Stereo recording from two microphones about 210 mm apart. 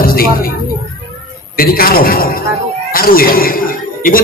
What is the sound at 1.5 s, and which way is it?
A man's voice, 45° left (ahead or behind).